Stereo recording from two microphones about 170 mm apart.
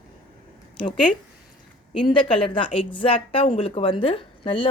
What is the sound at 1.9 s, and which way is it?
Speech, 30° left (ahead or behind).